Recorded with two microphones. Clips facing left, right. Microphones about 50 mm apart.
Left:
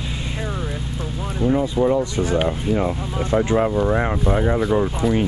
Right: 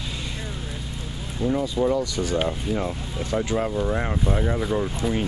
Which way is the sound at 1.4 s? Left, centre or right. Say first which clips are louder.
Left 4 dB; centre.